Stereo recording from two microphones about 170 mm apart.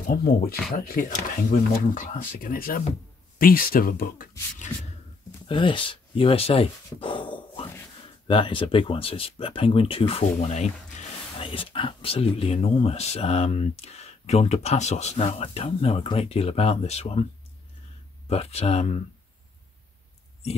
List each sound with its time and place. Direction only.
0.1 s speech: 60° left (ahead or behind)
5.5 s speech: 30° left (ahead or behind)
18.3 s speech: 40° left (ahead or behind)